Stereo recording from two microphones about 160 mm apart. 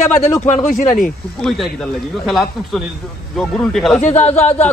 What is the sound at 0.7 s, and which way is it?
Speech, 60° left (ahead or behind).